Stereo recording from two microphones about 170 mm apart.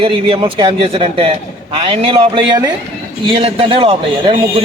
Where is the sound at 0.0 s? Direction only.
30° right (ahead or behind).